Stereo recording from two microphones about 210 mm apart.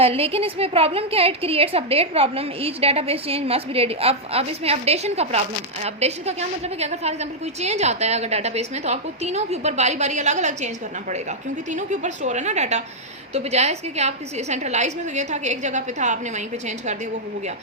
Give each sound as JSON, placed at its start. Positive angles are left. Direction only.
{"t": 0.0, "sound": "a woman's voice", "side_deg": -25}